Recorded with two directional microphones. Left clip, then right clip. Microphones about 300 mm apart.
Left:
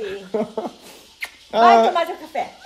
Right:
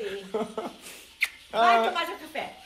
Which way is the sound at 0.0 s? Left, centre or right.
Left.